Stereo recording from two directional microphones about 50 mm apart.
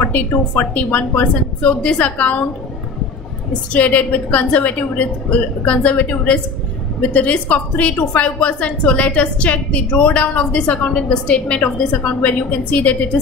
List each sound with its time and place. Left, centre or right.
0.0 s a woman's voice: left
3.7 s a woman's voice: left